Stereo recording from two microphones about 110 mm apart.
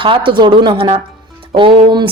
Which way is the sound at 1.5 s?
45° right (ahead or behind).